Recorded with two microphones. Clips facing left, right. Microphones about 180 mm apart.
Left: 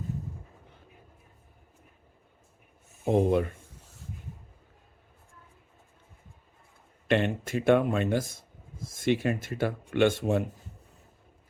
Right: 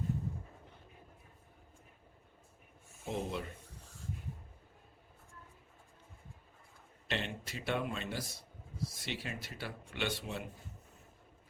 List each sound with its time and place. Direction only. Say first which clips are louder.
3.0 s speech: left 14 dB; 55° left (ahead or behind)
7.1 s speech: left 13 dB; 50° left (ahead or behind)